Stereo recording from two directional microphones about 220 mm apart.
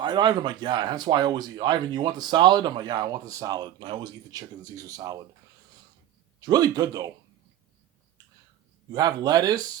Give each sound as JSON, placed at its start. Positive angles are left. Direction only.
{"t": 0.0, "sound": "speech", "side_deg": -20}
{"t": 6.4, "sound": "speech", "side_deg": -15}
{"t": 8.9, "sound": "speech", "side_deg": -20}